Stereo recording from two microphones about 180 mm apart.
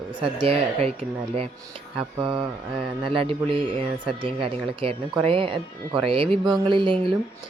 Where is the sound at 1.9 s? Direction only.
30° right (ahead or behind).